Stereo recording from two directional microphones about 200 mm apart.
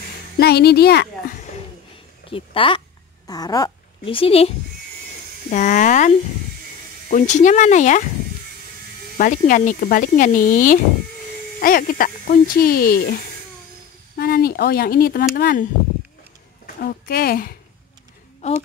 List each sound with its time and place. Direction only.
0.4 s a child's voice: 55° left (ahead or behind)
2.3 s speech: 25° left (ahead or behind)
9.2 s speech: 40° left (ahead or behind)